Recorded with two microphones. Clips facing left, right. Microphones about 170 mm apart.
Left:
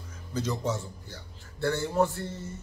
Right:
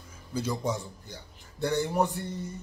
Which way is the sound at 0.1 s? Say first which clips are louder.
Even; 10° right (ahead or behind).